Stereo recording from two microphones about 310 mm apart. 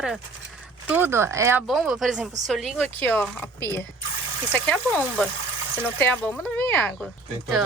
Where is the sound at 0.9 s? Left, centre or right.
Centre.